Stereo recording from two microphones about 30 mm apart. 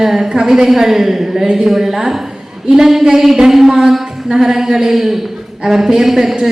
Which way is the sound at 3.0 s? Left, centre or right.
Centre.